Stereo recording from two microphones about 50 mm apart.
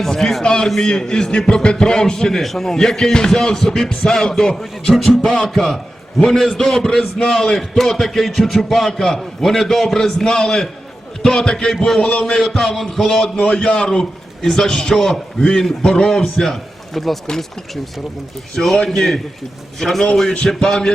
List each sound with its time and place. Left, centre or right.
0.0 s a man's voice: centre
0.4 s a man's voice: centre
18.5 s a man's voice: centre